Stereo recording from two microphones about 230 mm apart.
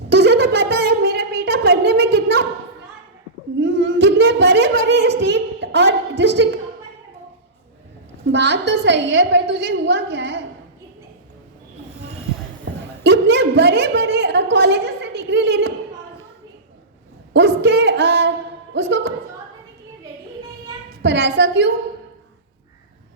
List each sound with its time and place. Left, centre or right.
0.1 s a sound: right
3.6 s a sound: right
8.3 s a woman's voice: right
12.6 s a woman's voice: right
17.3 s a woman's voice: right
21.0 s a woman's voice: right